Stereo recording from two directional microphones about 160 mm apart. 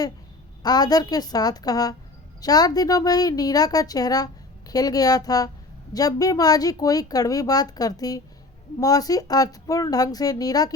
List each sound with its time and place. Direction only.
0.6 s a woman's voice: 25° left (ahead or behind)